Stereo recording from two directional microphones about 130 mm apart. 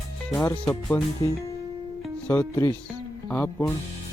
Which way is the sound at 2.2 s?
15° left (ahead or behind).